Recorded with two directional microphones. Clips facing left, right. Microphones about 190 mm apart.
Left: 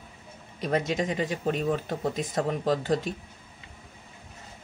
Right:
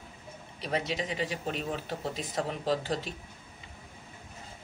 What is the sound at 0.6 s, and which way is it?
Speech, 50° left (ahead or behind).